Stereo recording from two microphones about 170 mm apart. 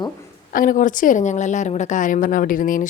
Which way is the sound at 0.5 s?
50° left (ahead or behind).